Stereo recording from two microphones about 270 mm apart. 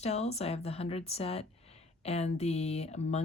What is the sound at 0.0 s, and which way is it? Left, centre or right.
Speech, left.